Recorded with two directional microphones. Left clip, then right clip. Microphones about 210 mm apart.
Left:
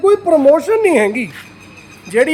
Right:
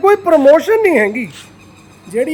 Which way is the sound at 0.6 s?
10° right (ahead or behind).